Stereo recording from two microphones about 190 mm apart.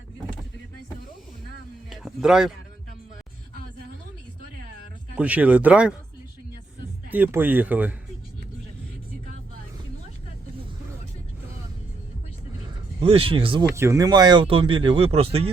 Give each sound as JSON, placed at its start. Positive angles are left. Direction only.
{"t": 1.9, "sound": "a sound", "side_deg": 0}
{"t": 5.1, "sound": "speech", "side_deg": -5}
{"t": 7.1, "sound": "speech", "side_deg": -10}
{"t": 13.0, "sound": "speech", "side_deg": -30}
{"t": 13.7, "sound": "speech", "side_deg": -15}